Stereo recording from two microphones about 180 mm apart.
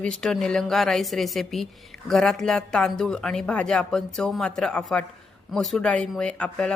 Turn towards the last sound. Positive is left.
turn(degrees=5)  # may be behind; listen again after turning